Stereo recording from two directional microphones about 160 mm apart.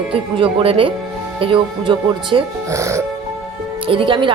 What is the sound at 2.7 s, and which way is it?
Music, 20° right (ahead or behind).